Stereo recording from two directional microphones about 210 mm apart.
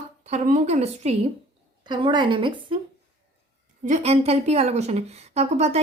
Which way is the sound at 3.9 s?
30° right (ahead or behind).